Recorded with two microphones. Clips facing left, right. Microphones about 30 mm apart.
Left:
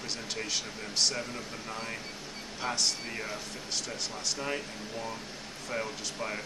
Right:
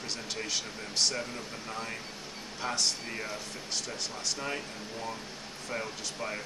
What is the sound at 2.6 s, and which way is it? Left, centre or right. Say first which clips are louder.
Speech: even; centre.